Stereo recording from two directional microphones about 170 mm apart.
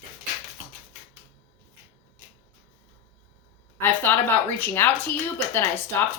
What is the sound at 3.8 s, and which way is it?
Speech, 10° left (ahead or behind).